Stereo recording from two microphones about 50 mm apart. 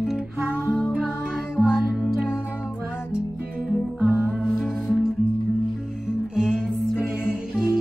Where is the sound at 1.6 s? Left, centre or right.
Centre.